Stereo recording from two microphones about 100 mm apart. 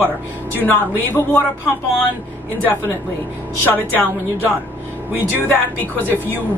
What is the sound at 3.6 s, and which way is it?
Speech, 20° left (ahead or behind).